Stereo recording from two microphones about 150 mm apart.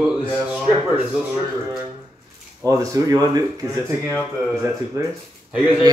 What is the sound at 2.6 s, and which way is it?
Speech, 20° right (ahead or behind).